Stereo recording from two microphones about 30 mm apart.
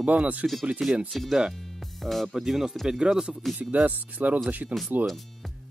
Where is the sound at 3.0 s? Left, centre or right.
Right.